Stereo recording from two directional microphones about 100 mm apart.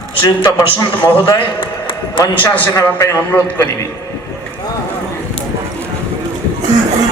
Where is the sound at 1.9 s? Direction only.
45° left (ahead or behind).